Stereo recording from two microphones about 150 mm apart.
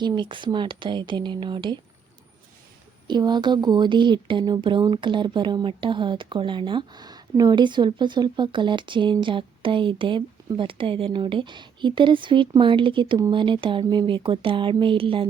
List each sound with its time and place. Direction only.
0.0 s speech: 30° right (ahead or behind)
3.1 s speech: 30° right (ahead or behind)